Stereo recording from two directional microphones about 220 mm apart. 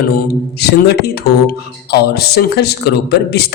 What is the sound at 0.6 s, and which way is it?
Speech, 45° left (ahead or behind).